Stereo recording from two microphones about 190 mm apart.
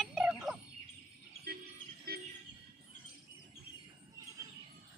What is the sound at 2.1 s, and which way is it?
Train, 55° right (ahead or behind).